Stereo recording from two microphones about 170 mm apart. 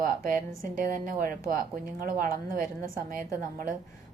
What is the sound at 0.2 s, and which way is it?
A woman's voice, 55° right (ahead or behind).